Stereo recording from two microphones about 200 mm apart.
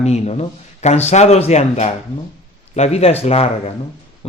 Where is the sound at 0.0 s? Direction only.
30° left (ahead or behind).